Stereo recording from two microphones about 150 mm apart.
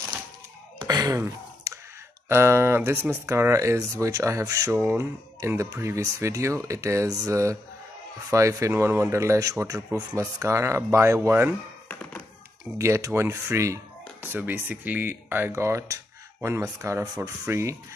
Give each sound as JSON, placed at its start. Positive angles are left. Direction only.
{"t": 0.8, "sound": "sigh", "side_deg": -25}
{"t": 2.2, "sound": "speech", "side_deg": -15}
{"t": 11.9, "sound": "hands", "side_deg": 10}
{"t": 12.7, "sound": "speech", "side_deg": -20}